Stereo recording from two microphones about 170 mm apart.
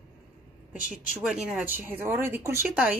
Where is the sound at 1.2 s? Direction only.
5° right (ahead or behind).